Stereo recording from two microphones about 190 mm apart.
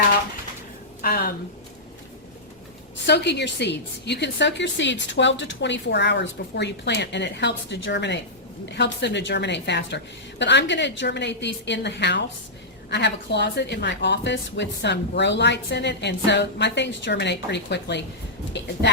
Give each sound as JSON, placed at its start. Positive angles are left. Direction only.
{"t": 1.0, "sound": "a woman's voice", "side_deg": 55}
{"t": 3.1, "sound": "a woman's voice", "side_deg": 65}